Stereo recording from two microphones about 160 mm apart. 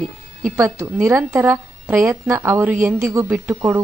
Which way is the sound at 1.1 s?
15° right (ahead or behind).